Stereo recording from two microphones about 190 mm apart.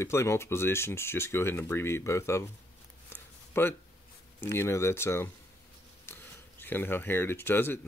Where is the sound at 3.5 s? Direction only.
10° left (ahead or behind).